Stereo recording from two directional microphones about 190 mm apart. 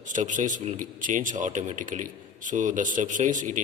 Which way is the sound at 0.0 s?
40° right (ahead or behind).